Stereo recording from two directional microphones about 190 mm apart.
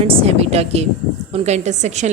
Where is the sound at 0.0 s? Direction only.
30° right (ahead or behind).